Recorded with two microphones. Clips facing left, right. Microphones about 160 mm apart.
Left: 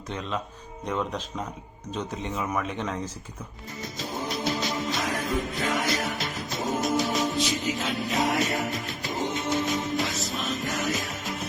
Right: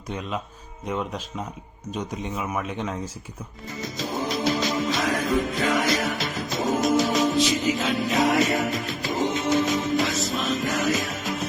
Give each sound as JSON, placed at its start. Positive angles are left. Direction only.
{"t": 0.1, "sound": "speech", "side_deg": -10}
{"t": 3.8, "sound": "music", "side_deg": -90}